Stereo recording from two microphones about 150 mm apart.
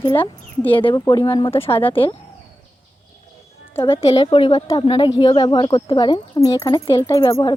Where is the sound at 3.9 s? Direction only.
40° left (ahead or behind).